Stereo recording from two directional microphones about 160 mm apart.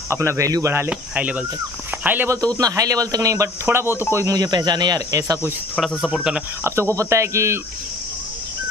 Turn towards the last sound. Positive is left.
turn(degrees=-15)  # may be behind; listen again after turning